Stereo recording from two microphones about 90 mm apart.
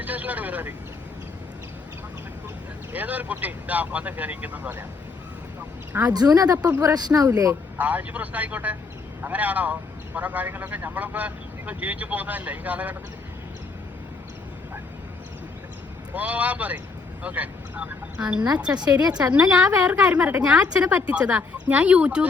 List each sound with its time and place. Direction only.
0.0 s vehicle: 15° right (ahead or behind)
2.9 s a woman's voice: 20° right (ahead or behind)
5.9 s a woman's voice: 15° right (ahead or behind)
6.1 s speech: 45° right (ahead or behind)
7.8 s a woman's voice: 15° right (ahead or behind)
16.1 s a woman's voice: 15° right (ahead or behind)
18.8 s speech: 50° right (ahead or behind)
19.3 s a woman's voice: 10° right (ahead or behind)